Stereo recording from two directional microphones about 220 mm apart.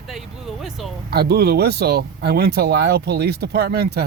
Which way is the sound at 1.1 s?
45° right (ahead or behind).